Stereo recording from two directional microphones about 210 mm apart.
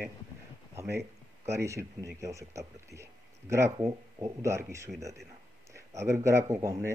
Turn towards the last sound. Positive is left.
turn(degrees=-15)  # may be behind; listen again after turning